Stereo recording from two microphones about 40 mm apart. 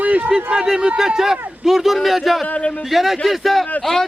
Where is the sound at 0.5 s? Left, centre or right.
Centre.